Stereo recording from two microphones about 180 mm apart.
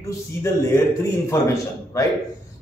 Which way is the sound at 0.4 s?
15° left (ahead or behind).